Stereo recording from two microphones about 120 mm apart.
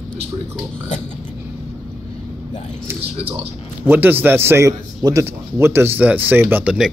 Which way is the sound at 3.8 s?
15° right (ahead or behind).